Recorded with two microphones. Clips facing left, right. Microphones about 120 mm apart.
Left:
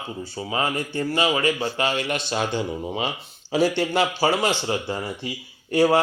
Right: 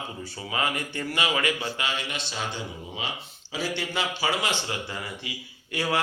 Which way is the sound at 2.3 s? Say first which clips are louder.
Left 9 dB; 55° left (ahead or behind).